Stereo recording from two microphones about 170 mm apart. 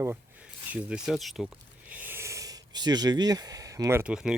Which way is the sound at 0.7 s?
5° right (ahead or behind).